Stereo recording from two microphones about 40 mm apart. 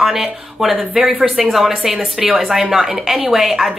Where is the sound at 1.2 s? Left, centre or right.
Right.